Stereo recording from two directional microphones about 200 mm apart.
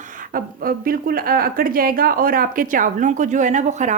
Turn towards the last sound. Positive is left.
turn(degrees=-35)  # may be behind; listen again after turning